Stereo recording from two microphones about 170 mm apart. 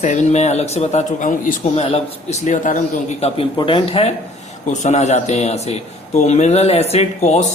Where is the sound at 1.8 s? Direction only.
40° left (ahead or behind).